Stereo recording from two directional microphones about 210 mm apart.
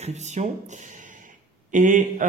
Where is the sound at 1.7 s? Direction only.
35° right (ahead or behind).